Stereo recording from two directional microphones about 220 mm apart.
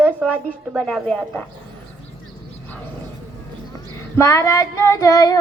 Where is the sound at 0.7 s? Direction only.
Centre (ahead or behind).